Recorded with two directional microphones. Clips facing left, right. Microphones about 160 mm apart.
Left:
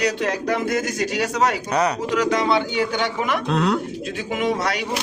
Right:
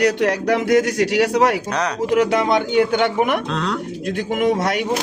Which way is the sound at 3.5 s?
10° left (ahead or behind).